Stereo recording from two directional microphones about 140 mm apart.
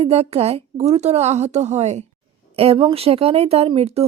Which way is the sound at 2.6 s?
40° right (ahead or behind).